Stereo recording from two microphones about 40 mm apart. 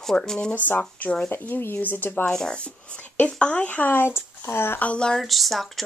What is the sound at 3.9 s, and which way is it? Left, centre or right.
Speech, left.